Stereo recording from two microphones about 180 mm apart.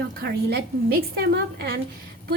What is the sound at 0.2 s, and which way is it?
A woman's voice, 60° right (ahead or behind).